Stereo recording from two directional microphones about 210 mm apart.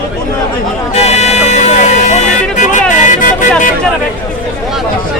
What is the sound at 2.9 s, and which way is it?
Music, 35° left (ahead or behind).